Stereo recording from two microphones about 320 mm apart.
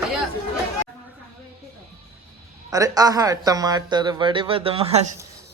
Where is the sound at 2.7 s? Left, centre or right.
Centre.